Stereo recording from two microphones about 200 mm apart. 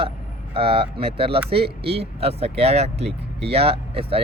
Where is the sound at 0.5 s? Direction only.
30° right (ahead or behind).